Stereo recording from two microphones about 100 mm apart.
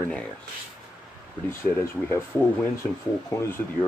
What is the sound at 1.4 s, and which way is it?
Speech, 25° left (ahead or behind).